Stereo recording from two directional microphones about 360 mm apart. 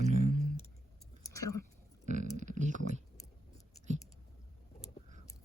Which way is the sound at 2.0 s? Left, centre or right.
Centre.